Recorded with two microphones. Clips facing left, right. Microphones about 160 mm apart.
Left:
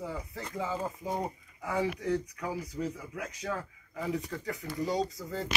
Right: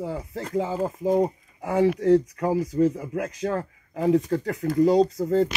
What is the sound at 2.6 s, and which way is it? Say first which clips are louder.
Speech: right 14 dB; 90° right.